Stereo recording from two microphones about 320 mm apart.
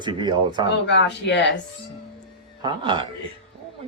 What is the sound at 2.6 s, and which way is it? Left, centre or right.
Speech, centre.